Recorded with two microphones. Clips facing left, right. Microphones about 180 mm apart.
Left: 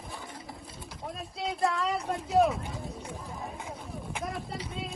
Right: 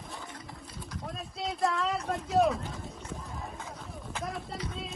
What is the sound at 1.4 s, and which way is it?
Speech, centre (ahead or behind).